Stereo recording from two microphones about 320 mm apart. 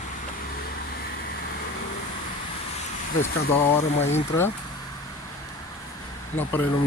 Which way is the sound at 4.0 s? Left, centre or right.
Centre.